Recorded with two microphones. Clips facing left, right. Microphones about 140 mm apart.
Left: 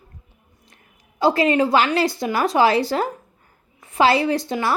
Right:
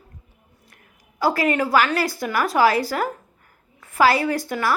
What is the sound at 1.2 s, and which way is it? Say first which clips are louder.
A woman's voice: left 3 dB; 25° left (ahead or behind).